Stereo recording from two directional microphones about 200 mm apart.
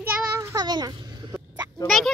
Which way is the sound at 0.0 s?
15° right (ahead or behind).